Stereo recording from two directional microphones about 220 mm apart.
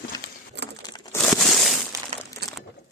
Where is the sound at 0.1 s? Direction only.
20° left (ahead or behind).